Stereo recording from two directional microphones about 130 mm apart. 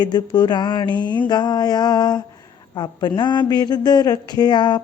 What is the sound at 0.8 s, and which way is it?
Mantra, 40° right (ahead or behind).